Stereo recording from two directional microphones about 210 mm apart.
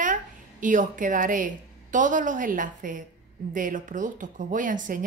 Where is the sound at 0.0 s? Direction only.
40° right (ahead or behind).